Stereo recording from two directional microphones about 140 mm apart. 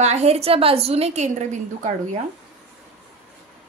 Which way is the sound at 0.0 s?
50° right (ahead or behind).